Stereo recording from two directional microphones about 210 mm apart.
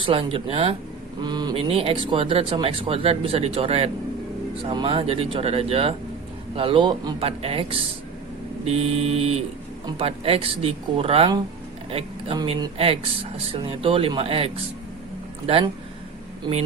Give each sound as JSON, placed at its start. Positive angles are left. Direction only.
{"t": 0.0, "sound": "speech", "side_deg": -25}